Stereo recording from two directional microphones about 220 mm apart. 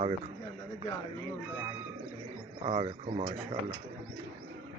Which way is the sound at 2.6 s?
30° right (ahead or behind).